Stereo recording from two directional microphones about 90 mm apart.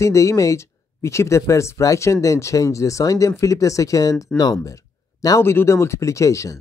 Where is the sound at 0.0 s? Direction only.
35° left (ahead or behind).